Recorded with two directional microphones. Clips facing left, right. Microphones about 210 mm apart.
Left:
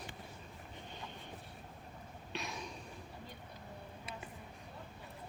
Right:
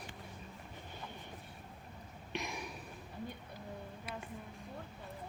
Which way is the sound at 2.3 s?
15° right (ahead or behind).